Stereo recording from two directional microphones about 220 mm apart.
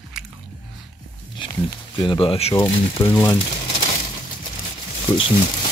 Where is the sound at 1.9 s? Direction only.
20° left (ahead or behind).